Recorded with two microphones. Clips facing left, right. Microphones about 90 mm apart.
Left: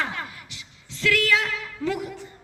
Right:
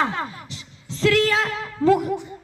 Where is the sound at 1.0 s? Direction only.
35° right (ahead or behind).